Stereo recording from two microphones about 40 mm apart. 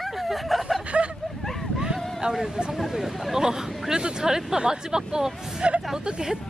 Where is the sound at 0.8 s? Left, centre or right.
Right.